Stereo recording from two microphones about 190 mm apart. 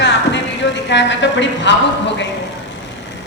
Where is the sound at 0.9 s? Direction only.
70° left (ahead or behind).